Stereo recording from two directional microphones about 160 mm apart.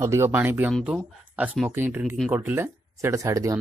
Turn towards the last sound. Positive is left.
turn(degrees=-20)  # may be behind; listen again after turning